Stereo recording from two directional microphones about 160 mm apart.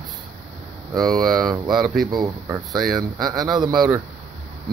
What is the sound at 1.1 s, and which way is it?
Speech, centre (ahead or behind).